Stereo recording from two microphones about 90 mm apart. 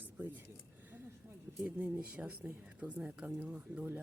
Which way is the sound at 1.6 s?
15° right (ahead or behind).